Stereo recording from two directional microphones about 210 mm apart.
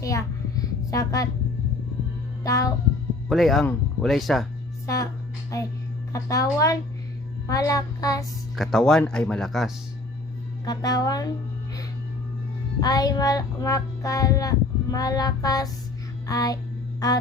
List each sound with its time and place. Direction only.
0.0 s a sound: 15° left (ahead or behind)
2.4 s music: 15° left (ahead or behind)
3.2 s speech: centre (ahead or behind)
5.5 s child singing: 15° left (ahead or behind)
8.2 s speech: centre (ahead or behind)
10.7 s child singing: 20° left (ahead or behind)
12.8 s child singing: 20° left (ahead or behind)
16.2 s music: 15° left (ahead or behind)
17.0 s child singing: 15° left (ahead or behind)